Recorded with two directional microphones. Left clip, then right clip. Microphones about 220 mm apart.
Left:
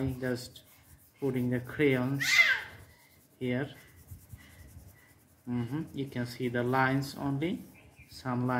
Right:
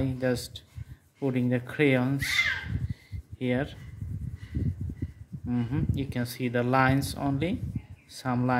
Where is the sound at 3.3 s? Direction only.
40° right (ahead or behind).